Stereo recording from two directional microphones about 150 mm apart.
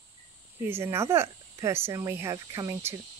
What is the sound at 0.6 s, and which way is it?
Speech, 15° right (ahead or behind).